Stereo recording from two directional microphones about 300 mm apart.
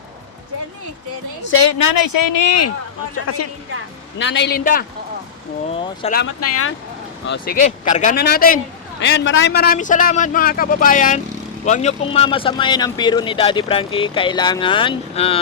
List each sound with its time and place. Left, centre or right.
1.5 s speech: left
1.8 s speech: left
4.2 s a man's voice: left
5.6 s a man's voice: centre
6.2 s speech: left
7.3 s a man's voice: left
9.0 s a man's voice: left; by 15.4 s centre